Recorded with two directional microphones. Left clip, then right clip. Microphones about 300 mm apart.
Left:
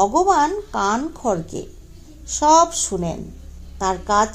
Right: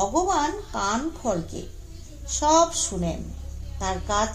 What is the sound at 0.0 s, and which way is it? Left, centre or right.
A woman's voice, left.